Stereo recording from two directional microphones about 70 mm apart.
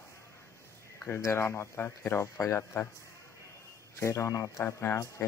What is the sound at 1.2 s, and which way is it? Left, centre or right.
Speech, left.